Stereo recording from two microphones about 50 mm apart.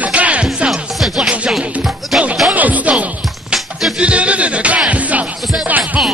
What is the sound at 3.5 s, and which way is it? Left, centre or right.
Music, centre.